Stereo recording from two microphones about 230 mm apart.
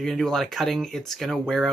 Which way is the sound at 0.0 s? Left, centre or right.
Centre.